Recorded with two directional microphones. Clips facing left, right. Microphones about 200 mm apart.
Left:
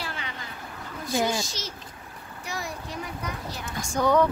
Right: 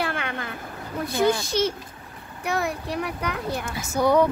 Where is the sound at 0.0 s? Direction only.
60° right (ahead or behind).